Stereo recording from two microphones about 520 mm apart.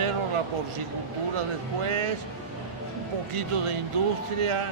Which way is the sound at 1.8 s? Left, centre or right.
Right.